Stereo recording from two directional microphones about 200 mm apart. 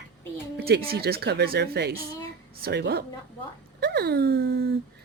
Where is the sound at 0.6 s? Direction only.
50° right (ahead or behind).